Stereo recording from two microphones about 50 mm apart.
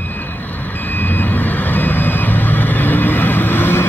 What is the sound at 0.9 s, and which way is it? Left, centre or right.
Vehicle, left.